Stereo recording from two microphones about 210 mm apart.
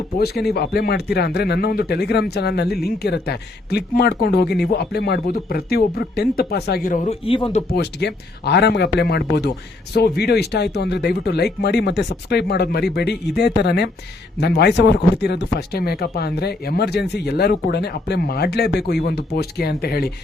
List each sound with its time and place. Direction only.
0.2 s a man's voice: 50° left (ahead or behind); by 7.6 s 25° left (ahead or behind)
7.8 s a man's voice: 50° left (ahead or behind)